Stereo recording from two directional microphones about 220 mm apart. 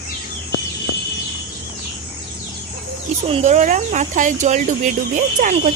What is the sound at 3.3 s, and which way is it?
Speech, 30° right (ahead or behind).